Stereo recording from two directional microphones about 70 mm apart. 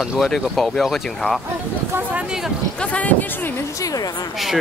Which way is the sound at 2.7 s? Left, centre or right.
Left.